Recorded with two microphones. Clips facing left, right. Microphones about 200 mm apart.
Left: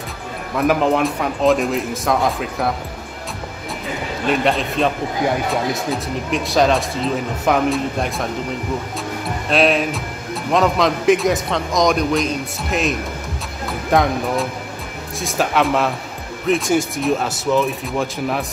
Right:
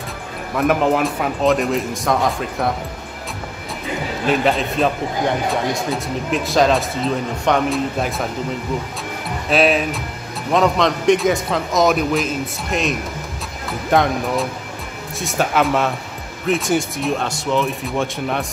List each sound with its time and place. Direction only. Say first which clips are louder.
0.6 s speech: even; centre (ahead or behind)
4.3 s speech: even; centre (ahead or behind)
9.5 s speech: even; centre (ahead or behind)